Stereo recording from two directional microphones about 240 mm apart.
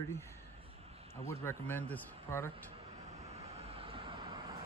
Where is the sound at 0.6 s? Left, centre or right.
Right.